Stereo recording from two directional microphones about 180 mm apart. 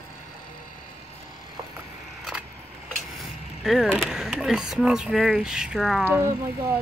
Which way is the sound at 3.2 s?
Centre (ahead or behind).